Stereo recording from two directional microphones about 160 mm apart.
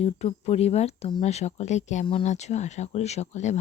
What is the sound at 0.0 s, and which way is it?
Speech, 40° left (ahead or behind).